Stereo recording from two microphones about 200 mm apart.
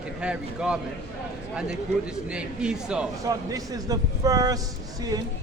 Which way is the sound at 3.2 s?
15° right (ahead or behind).